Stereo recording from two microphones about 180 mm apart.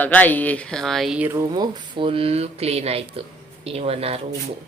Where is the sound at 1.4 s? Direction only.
25° right (ahead or behind).